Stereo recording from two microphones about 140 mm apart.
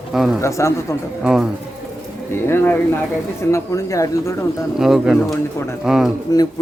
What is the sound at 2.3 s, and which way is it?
A man's voice, 15° left (ahead or behind).